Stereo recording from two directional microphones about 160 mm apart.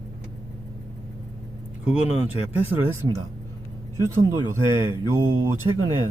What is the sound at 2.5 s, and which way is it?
Speech, 10° right (ahead or behind).